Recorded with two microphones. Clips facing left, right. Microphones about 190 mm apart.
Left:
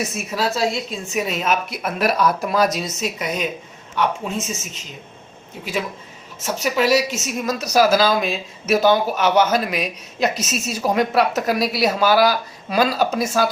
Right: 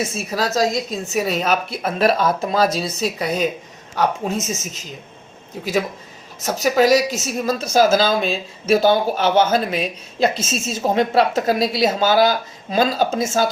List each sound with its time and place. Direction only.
0.0 s a woman's voice: 30° right (ahead or behind)
6.4 s a woman's voice: 40° right (ahead or behind); by 13.5 s 25° right (ahead or behind)